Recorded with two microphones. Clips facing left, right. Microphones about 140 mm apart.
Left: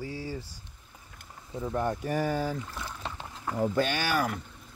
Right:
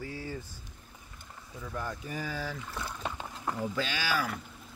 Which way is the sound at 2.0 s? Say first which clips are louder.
Left 8 dB; 60° left (ahead or behind).